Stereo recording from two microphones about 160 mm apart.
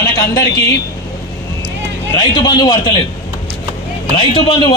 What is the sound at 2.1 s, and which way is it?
Speech, 25° left (ahead or behind).